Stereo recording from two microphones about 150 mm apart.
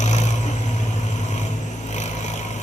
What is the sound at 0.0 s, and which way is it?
Vehicle, 50° left (ahead or behind).